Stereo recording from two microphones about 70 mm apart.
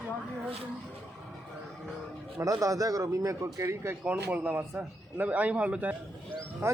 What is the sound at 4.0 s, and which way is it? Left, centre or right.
A man's voice, right.